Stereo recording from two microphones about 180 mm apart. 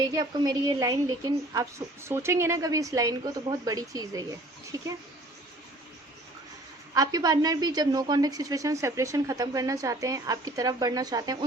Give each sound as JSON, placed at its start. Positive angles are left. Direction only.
{"t": 0.0, "sound": "a woman's voice", "side_deg": -20}
{"t": 6.9, "sound": "a woman's voice", "side_deg": -20}